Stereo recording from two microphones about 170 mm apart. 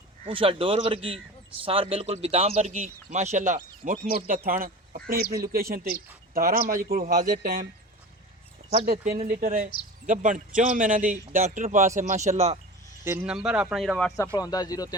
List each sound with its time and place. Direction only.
0.3 s a man's voice: 30° right (ahead or behind); by 3.9 s 45° right (ahead or behind)
4.4 s a man's voice: 55° right (ahead or behind)
8.9 s a man's voice: 60° right (ahead or behind); by 12.5 s 40° right (ahead or behind)
13.1 s speech: 10° right (ahead or behind)
14.3 s speech: 20° left (ahead or behind)